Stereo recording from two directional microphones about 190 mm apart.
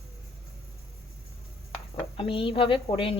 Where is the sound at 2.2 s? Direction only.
25° left (ahead or behind).